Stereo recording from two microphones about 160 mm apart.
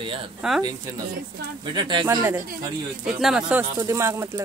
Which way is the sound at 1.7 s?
30° right (ahead or behind).